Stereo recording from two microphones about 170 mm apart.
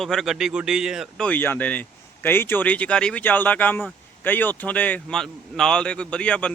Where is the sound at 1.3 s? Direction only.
10° left (ahead or behind).